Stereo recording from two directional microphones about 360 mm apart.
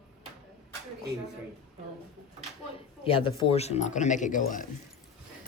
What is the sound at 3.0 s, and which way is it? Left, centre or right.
Speech, centre.